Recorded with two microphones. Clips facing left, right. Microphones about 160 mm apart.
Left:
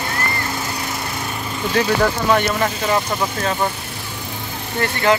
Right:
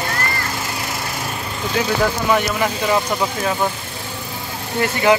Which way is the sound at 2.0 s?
5° right (ahead or behind).